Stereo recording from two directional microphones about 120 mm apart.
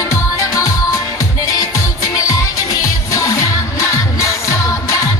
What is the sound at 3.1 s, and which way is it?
Music, 25° left (ahead or behind).